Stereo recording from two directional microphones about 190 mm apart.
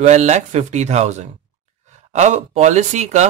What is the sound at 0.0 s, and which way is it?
Speech, 35° right (ahead or behind).